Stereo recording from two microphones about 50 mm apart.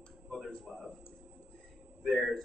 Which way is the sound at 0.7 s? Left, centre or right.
Centre.